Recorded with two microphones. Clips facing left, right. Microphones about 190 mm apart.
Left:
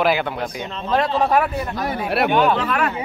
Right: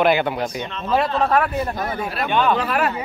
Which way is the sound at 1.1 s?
10° left (ahead or behind).